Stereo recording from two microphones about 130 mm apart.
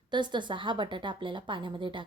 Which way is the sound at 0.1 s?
35° right (ahead or behind).